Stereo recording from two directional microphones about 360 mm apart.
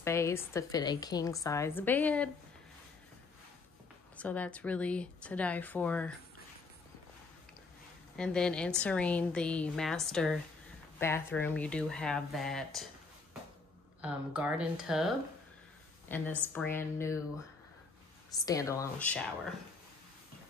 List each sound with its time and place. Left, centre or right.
0.0 s a woman's voice: centre
4.2 s a woman's voice: centre
8.2 s a woman's voice: centre
14.0 s a woman's voice: centre
16.3 s a woman's voice: centre
18.4 s a woman's voice: centre